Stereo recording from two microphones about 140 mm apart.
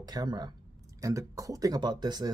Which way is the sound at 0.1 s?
30° right (ahead or behind).